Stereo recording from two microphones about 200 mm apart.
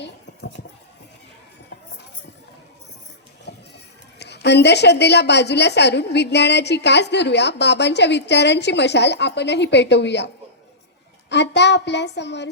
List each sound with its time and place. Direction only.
4.2 s a woman's voice: 60° left (ahead or behind)
11.3 s a woman's voice: 60° left (ahead or behind)